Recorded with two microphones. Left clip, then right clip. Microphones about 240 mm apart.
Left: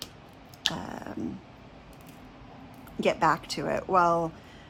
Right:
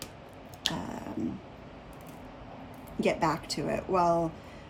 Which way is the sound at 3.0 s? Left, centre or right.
Centre.